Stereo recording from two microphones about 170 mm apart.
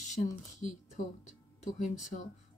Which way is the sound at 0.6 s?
45° left (ahead or behind).